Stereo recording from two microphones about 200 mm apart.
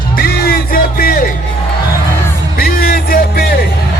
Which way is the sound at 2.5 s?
50° left (ahead or behind).